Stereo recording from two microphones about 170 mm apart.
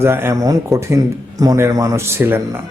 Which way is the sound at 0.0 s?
15° right (ahead or behind).